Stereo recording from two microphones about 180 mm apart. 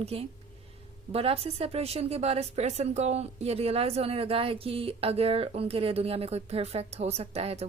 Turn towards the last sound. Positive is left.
turn(degrees=-35)  # may be behind; listen again after turning